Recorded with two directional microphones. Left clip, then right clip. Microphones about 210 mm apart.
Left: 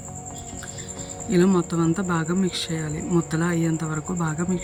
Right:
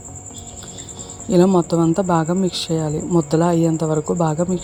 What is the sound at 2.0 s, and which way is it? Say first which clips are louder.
Speech: right 7 dB; 10° left (ahead or behind).